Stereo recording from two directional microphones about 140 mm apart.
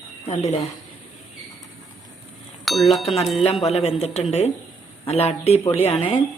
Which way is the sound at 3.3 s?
45° left (ahead or behind).